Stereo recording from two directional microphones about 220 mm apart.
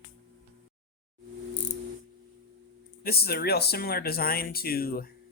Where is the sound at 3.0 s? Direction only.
45° left (ahead or behind).